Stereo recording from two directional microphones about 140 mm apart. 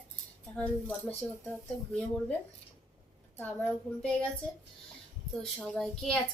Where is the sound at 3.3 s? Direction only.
10° left (ahead or behind).